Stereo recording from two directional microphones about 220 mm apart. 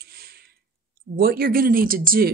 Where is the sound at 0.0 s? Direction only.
45° right (ahead or behind).